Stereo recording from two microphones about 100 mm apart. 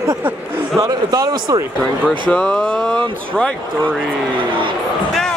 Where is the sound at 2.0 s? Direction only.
10° left (ahead or behind).